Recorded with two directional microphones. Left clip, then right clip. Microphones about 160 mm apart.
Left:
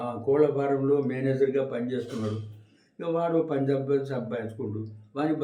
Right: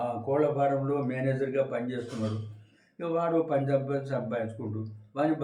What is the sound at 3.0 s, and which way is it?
A man's voice, 20° left (ahead or behind).